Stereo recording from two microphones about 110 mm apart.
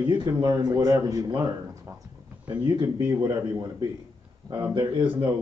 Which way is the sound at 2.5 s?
45° right (ahead or behind).